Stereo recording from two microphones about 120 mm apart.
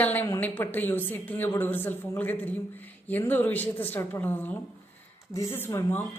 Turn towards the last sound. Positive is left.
turn(degrees=20)  # may be behind; listen again after turning